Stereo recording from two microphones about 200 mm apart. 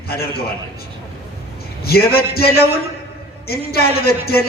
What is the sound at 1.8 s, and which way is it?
A man's voice, 50° left (ahead or behind).